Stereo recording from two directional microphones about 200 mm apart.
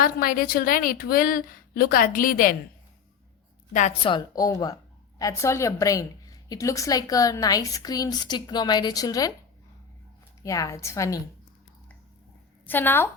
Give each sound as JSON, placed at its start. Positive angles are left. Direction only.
{"t": 0.0, "sound": "a woman's voice", "side_deg": 45}
{"t": 3.7, "sound": "a woman's voice", "side_deg": 35}
{"t": 4.0, "sound": "a woman's voice", "side_deg": 20}
{"t": 10.4, "sound": "a woman's voice", "side_deg": 15}
{"t": 12.6, "sound": "a woman's voice", "side_deg": 10}